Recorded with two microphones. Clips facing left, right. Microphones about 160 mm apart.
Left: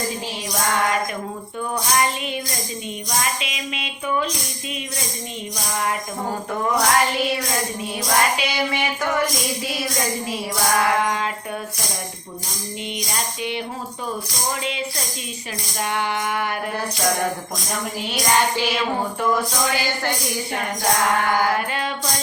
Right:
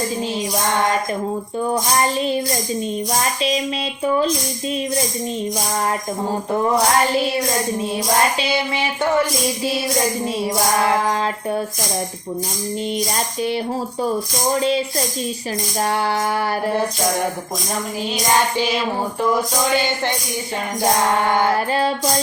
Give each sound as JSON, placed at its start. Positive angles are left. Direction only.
{"t": 2.0, "sound": "music", "side_deg": -35}
{"t": 3.4, "sound": "music", "side_deg": -35}
{"t": 6.5, "sound": "music", "side_deg": -30}
{"t": 10.8, "sound": "music", "side_deg": -30}
{"t": 14.5, "sound": "music", "side_deg": -35}
{"t": 21.5, "sound": "music", "side_deg": -35}